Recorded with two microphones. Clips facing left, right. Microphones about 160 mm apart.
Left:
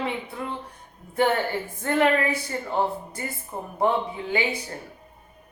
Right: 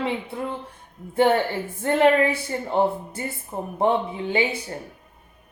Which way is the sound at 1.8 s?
25° right (ahead or behind).